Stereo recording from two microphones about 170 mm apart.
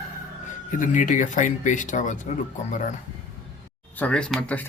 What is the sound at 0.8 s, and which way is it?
Speech, 50° left (ahead or behind).